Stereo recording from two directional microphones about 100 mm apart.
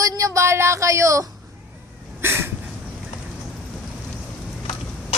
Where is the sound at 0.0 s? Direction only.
35° right (ahead or behind).